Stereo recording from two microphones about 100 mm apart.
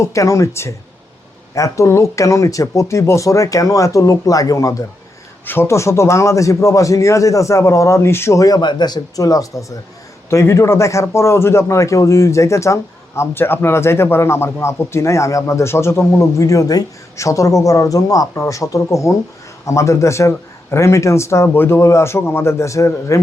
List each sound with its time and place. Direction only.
0.0 s a man's voice: 30° left (ahead or behind)